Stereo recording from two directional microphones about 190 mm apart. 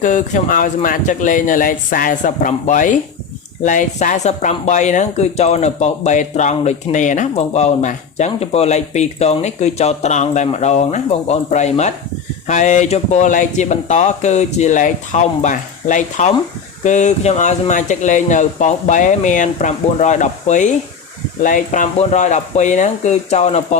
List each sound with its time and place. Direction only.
0.0 s speech: 40° left (ahead or behind)